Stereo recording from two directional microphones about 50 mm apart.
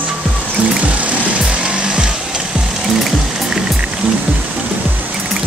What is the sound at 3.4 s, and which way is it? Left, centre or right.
Music, centre.